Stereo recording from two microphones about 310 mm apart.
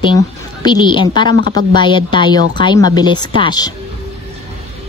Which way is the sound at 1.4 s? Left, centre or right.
Right.